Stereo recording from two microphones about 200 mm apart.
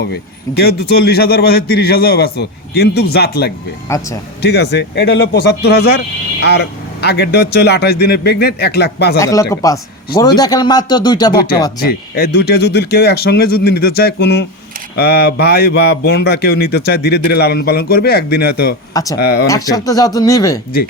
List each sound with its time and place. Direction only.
0.6 s a man's voice: 50° left (ahead or behind)
3.8 s speech: 15° left (ahead or behind)
4.4 s a man's voice: 55° left (ahead or behind)
9.1 s speech: 15° left (ahead or behind)
11.8 s a man's voice: 50° left (ahead or behind)
19.5 s speech: 15° left (ahead or behind)